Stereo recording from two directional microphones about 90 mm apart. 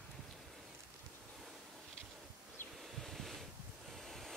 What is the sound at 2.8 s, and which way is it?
Waves, centre (ahead or behind).